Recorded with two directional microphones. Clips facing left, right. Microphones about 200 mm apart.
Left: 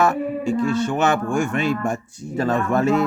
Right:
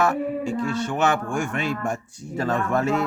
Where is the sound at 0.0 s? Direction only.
20° left (ahead or behind).